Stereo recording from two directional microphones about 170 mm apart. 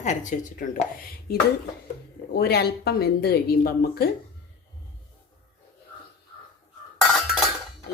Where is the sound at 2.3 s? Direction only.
70° left (ahead or behind).